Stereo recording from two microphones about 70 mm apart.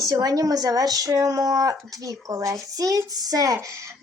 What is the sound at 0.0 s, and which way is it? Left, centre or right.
Speech, right.